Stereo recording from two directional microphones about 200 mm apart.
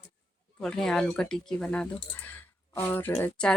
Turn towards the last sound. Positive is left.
turn(degrees=5)  # may be behind; listen again after turning